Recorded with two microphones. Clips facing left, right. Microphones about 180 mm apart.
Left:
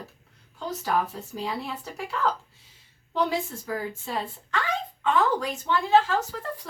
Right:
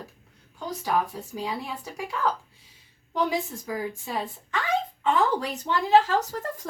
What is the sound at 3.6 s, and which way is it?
Speech, 15° right (ahead or behind).